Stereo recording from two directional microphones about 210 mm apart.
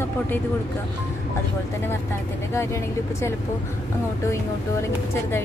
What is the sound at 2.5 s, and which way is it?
Speech, 15° left (ahead or behind).